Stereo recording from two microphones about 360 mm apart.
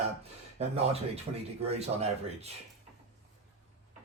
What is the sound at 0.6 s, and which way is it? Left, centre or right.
Speech, centre.